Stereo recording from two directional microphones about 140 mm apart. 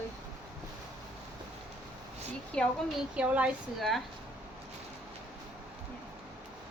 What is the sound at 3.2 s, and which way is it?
Speech, 10° right (ahead or behind).